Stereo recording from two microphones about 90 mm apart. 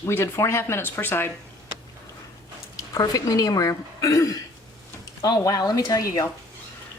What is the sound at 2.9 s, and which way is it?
Speech, 45° left (ahead or behind).